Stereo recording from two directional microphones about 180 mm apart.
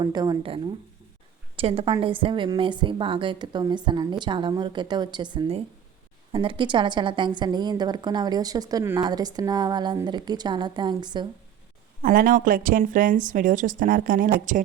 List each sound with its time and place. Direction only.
0.0 s a woman's voice: 25° right (ahead or behind)
12.0 s speech: 50° right (ahead or behind)